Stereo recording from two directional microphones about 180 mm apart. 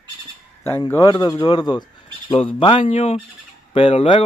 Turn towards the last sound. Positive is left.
turn(degrees=35)  # may be behind; listen again after turning